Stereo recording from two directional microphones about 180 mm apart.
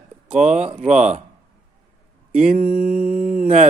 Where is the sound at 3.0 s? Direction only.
50° right (ahead or behind).